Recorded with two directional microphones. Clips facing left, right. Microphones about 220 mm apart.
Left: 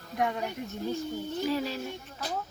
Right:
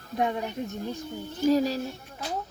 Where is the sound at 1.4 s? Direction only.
40° right (ahead or behind).